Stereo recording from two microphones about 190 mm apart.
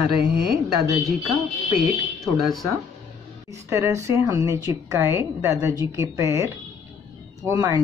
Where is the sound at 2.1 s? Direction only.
Centre (ahead or behind).